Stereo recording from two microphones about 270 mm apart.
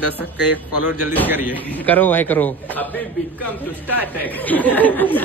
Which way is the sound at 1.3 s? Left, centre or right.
Centre.